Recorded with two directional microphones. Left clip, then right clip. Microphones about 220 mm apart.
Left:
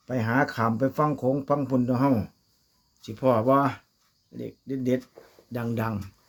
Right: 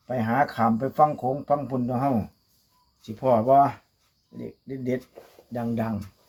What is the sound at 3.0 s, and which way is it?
Speech, 35° left (ahead or behind).